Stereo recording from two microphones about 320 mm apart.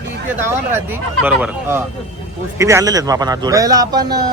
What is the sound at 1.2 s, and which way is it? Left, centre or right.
A man's voice, centre.